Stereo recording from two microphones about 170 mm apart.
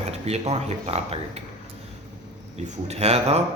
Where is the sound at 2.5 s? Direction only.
40° right (ahead or behind).